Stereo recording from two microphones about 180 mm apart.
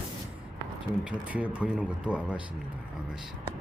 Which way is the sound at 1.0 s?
5° right (ahead or behind).